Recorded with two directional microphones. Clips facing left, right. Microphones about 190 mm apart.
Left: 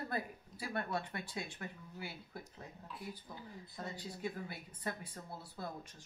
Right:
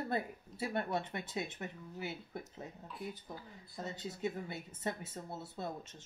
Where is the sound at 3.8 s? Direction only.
25° right (ahead or behind).